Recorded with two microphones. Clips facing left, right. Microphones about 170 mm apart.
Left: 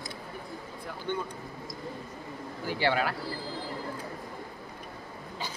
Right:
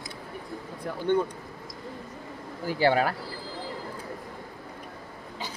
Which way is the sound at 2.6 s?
45° right (ahead or behind).